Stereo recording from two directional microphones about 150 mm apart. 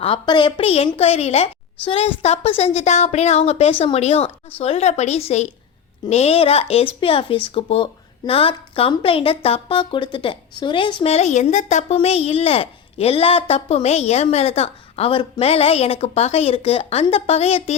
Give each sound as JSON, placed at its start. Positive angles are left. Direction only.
{"t": 0.0, "sound": "a woman's voice", "side_deg": 35}